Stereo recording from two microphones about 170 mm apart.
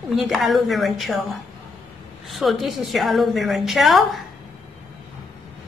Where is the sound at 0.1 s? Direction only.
Centre (ahead or behind).